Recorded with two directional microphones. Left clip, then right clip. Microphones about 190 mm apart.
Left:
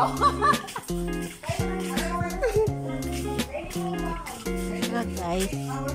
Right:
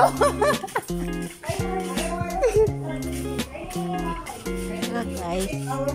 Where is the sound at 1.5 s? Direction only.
Centre (ahead or behind).